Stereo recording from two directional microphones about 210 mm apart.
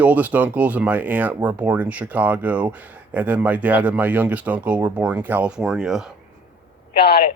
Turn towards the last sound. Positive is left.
turn(degrees=50)  # may be behind; listen again after turning